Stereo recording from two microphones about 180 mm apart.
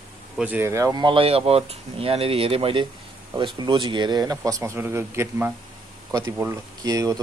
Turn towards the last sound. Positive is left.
turn(degrees=-20)  # may be behind; listen again after turning